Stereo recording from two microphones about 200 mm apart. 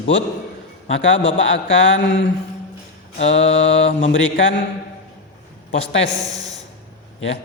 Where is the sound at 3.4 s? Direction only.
30° left (ahead or behind).